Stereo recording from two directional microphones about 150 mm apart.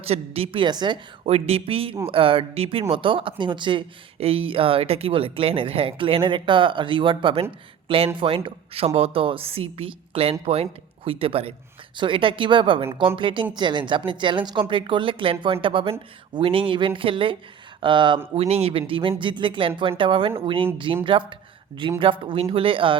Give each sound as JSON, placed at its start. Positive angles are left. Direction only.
{"t": 0.0, "sound": "speech", "side_deg": -40}